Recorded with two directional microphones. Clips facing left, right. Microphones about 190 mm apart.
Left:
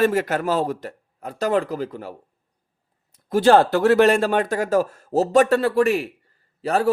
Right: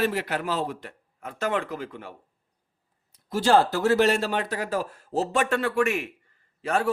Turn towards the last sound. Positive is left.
turn(degrees=35)  # may be behind; listen again after turning